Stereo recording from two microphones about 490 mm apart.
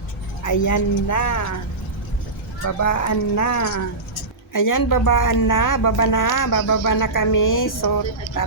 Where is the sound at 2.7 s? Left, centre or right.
Left.